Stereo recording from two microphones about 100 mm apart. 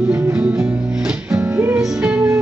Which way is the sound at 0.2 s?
15° right (ahead or behind).